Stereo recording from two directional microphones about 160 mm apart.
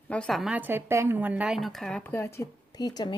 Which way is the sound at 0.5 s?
15° right (ahead or behind).